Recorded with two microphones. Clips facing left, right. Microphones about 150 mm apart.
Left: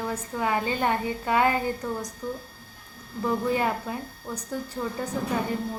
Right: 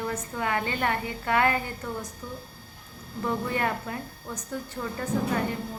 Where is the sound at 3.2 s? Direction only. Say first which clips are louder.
Left 3 dB; 15° left (ahead or behind).